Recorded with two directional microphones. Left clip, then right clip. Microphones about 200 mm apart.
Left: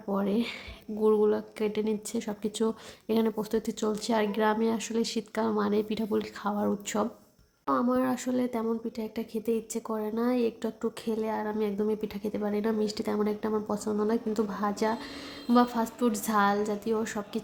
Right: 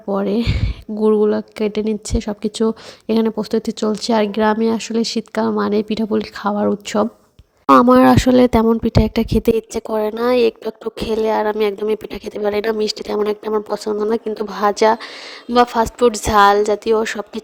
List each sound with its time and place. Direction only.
0.1 s a woman's voice: 40° right (ahead or behind)
7.7 s speech: 55° right (ahead or behind)